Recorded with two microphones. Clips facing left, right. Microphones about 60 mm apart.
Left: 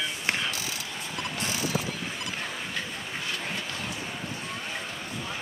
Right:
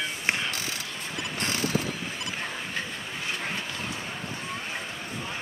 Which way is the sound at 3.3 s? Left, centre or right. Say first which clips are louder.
Right 3 dB; right.